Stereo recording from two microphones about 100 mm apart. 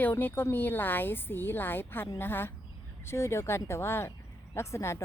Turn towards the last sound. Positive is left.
turn(degrees=30)  # may be behind; listen again after turning